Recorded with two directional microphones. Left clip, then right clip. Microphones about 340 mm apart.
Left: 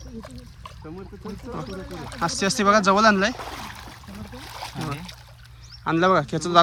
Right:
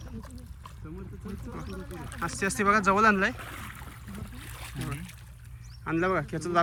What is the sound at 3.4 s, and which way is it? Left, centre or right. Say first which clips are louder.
Speech: left 7 dB; left.